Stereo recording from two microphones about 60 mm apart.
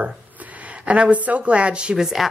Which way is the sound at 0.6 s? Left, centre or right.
Right.